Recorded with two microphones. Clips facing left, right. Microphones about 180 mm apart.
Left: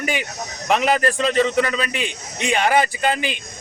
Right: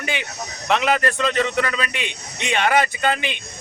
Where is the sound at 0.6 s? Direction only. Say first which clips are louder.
Left 1 dB; 40° left (ahead or behind).